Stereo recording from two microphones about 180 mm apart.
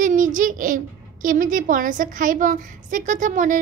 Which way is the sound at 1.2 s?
50° right (ahead or behind).